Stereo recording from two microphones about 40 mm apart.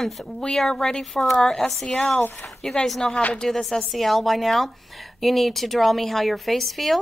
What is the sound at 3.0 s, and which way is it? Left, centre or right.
A woman's voice, centre.